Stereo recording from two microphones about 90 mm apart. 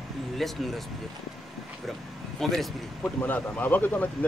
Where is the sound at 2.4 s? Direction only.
5° left (ahead or behind).